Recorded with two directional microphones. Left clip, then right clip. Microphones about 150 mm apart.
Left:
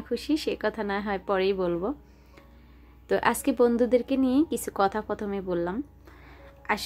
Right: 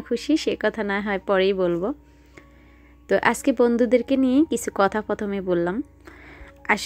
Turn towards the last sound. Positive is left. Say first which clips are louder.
# right 6 dB
turn(degrees=-35)  # may be behind; listen again after turning